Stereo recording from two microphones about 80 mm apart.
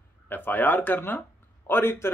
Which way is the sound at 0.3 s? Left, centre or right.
Left.